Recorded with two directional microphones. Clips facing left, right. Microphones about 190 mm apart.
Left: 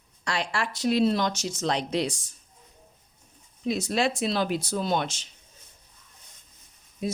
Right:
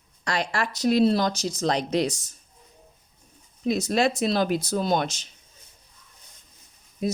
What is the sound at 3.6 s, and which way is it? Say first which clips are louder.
Speech: right 3 dB; 45° right (ahead or behind).